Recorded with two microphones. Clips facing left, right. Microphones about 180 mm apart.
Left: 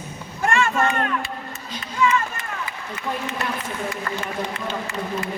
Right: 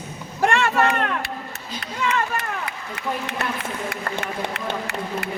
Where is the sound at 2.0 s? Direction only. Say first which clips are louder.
Left 2 dB; 65° right (ahead or behind).